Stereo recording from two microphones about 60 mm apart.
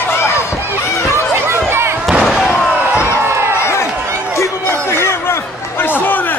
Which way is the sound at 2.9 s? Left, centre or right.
Left.